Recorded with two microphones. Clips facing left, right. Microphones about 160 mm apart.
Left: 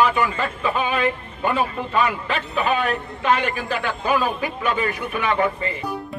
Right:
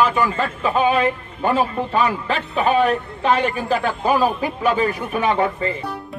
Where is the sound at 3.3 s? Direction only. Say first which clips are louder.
Right 3 dB; 35° right (ahead or behind).